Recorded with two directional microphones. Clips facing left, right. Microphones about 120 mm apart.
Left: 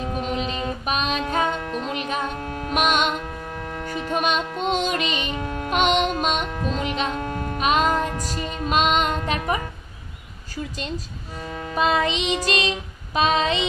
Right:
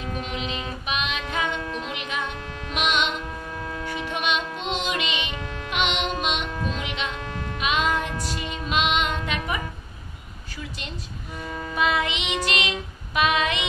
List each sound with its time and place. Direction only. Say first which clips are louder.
0.0 s music: left 5 dB; 40° left (ahead or behind)
11.3 s music: left 2 dB; 35° left (ahead or behind)